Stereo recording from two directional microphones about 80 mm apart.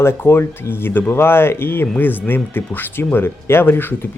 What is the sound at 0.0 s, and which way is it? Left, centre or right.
Speech, left.